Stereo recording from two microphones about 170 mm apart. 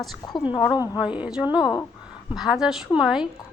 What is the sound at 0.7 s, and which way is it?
Speech, 20° left (ahead or behind).